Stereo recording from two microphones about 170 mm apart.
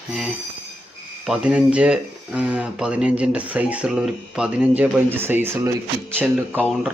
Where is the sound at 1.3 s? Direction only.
5° right (ahead or behind).